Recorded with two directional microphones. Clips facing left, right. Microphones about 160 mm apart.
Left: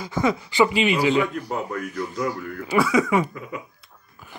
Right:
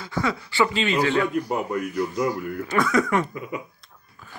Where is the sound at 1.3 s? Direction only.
15° right (ahead or behind).